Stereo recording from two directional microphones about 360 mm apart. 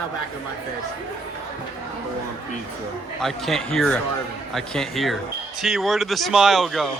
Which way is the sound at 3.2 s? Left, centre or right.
Centre.